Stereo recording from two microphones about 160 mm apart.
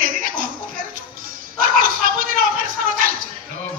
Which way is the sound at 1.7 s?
60° right (ahead or behind).